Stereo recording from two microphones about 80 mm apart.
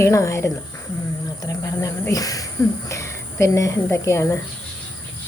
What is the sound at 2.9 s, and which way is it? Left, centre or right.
Speech, left.